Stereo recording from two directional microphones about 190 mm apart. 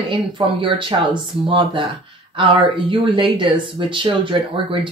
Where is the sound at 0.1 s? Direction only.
25° right (ahead or behind).